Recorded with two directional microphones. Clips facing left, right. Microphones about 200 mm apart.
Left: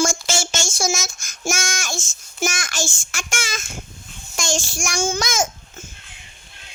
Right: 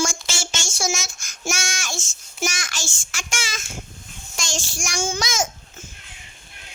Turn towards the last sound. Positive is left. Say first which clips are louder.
# left 3 dB
turn(degrees=50)  # may be behind; listen again after turning